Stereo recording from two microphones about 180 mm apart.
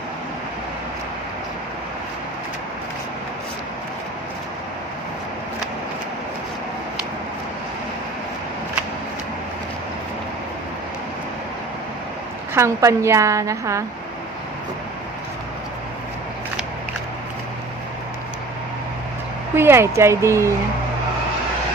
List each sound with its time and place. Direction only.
12.5 s a woman's voice: 15° right (ahead or behind)
19.5 s a woman's voice: 15° right (ahead or behind)